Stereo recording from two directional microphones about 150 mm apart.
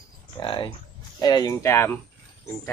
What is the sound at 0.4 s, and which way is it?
Speech, 30° left (ahead or behind).